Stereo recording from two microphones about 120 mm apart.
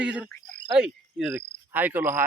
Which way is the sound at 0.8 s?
5° right (ahead or behind).